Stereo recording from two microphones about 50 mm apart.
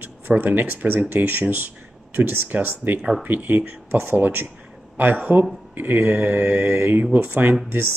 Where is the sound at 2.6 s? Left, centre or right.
Right.